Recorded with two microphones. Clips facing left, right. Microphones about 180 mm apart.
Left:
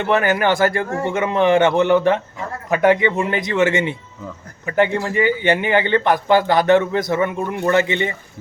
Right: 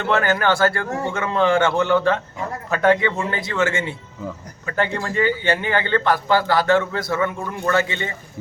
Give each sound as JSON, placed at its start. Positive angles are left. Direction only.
{"t": 0.0, "sound": "a man's voice", "side_deg": 15}